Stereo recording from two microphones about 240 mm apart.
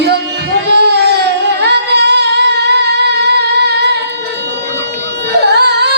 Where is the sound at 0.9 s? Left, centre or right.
Right.